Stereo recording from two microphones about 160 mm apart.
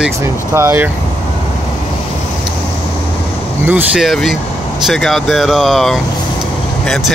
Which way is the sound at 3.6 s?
10° right (ahead or behind).